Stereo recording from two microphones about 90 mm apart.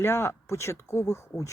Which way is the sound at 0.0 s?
30° left (ahead or behind).